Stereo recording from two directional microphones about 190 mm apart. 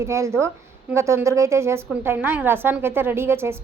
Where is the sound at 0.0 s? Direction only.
15° right (ahead or behind).